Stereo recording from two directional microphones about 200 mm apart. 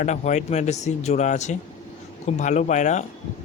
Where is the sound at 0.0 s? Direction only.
35° left (ahead or behind).